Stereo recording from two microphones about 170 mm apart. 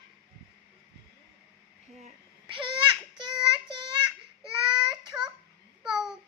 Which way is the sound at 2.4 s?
30° right (ahead or behind).